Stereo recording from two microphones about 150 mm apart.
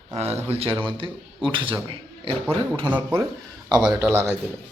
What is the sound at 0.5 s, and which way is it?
Speech, 40° right (ahead or behind).